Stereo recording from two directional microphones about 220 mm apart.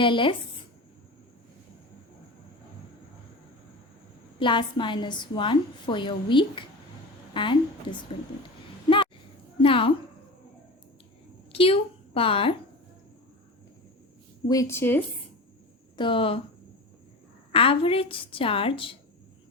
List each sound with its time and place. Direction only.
0.0 s a woman's voice: 20° left (ahead or behind)
4.4 s a woman's voice: 20° left (ahead or behind)
9.6 s a woman's voice: 25° left (ahead or behind)
11.5 s a woman's voice: 25° left (ahead or behind)
14.4 s a woman's voice: 15° left (ahead or behind)
16.0 s a woman's voice: 25° left (ahead or behind)
17.5 s a woman's voice: 25° left (ahead or behind)